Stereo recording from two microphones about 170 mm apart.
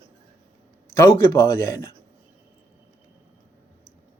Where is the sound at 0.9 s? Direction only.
20° left (ahead or behind).